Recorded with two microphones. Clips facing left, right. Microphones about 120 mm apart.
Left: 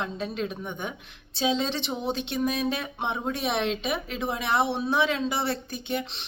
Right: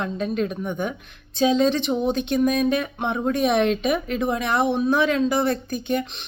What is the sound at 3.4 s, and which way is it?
Speech, 50° right (ahead or behind).